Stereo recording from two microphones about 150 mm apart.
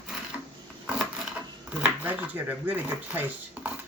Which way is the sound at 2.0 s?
10° right (ahead or behind).